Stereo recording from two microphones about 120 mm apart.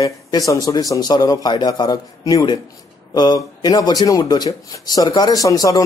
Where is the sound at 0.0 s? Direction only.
30° left (ahead or behind).